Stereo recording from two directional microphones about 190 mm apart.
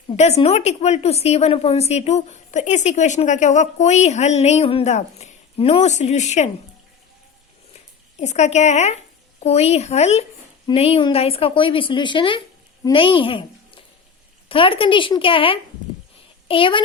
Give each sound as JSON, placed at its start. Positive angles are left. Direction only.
{"t": 0.2, "sound": "a woman's voice", "side_deg": 35}
{"t": 8.2, "sound": "a woman's voice", "side_deg": 35}